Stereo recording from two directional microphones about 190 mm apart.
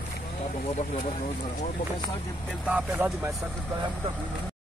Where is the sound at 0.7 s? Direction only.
40° left (ahead or behind).